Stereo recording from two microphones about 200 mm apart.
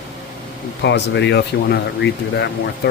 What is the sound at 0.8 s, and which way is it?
Speech, 60° left (ahead or behind).